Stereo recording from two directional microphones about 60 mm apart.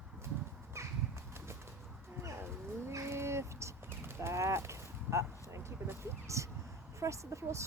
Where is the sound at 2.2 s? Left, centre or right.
Right.